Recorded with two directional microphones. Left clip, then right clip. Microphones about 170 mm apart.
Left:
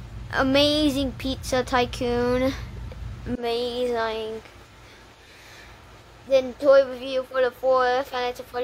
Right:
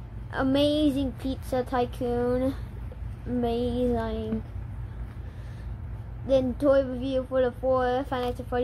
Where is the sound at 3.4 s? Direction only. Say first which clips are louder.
Left 2 dB; 10° right (ahead or behind).